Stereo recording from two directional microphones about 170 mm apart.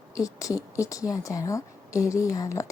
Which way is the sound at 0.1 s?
20° left (ahead or behind).